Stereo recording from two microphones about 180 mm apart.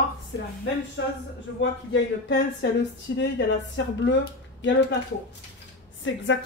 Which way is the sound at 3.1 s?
70° left (ahead or behind).